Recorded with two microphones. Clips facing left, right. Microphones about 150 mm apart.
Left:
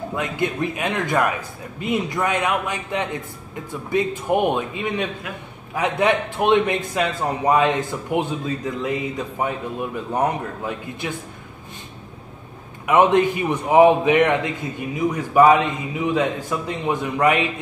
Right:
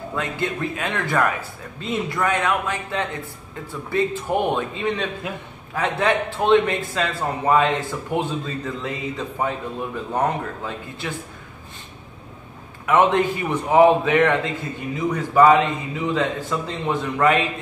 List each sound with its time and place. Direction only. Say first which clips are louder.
0.1 s a man's voice: left 1 dB; 15° left (ahead or behind)
12.8 s a man's voice: left 2 dB; 15° left (ahead or behind)